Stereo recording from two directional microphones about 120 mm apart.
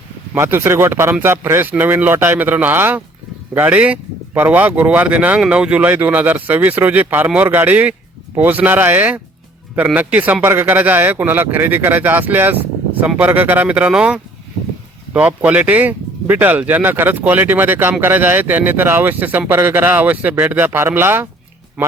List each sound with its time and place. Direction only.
0.3 s speech: 20° right (ahead or behind)